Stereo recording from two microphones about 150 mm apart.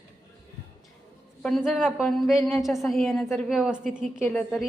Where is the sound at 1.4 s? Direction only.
5° left (ahead or behind).